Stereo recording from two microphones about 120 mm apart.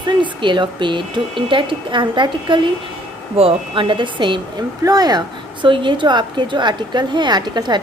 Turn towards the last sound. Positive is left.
turn(degrees=-35)  # may be behind; listen again after turning